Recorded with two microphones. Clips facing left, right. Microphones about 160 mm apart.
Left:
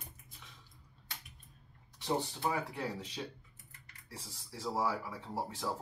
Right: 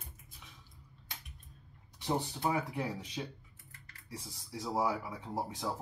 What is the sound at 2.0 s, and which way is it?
Speech, 15° right (ahead or behind).